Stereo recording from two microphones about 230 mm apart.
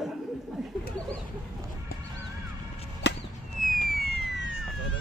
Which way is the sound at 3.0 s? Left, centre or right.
Left.